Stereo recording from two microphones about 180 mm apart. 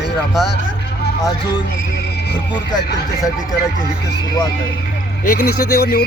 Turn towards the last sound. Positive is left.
turn(degrees=60)  # may be behind; listen again after turning